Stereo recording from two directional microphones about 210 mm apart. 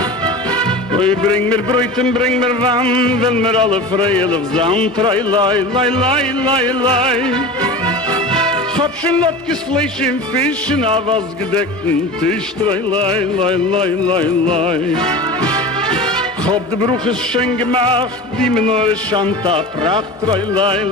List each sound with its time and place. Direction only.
0.5 s music: 25° right (ahead or behind)
9.5 s speech: 5° left (ahead or behind)
10.8 s music: 25° right (ahead or behind)
12.6 s music: 25° right (ahead or behind)